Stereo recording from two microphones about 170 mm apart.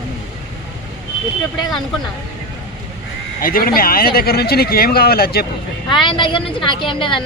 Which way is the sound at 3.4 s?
60° left (ahead or behind).